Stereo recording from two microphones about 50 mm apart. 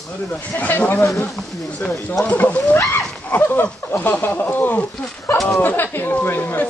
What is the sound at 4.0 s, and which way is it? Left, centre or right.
Speech, left.